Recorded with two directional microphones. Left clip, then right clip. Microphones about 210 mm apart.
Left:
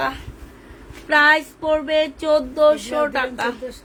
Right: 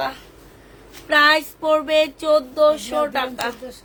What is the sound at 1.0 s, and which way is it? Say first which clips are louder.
Female singing: even; 10° left (ahead or behind).